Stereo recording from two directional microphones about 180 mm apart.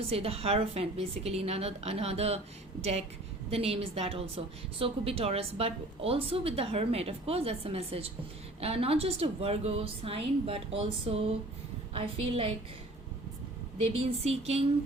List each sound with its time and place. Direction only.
0.0 s a woman's voice: 35° right (ahead or behind)
3.5 s a woman's voice: 35° right (ahead or behind)
14.0 s a woman's voice: 35° right (ahead or behind)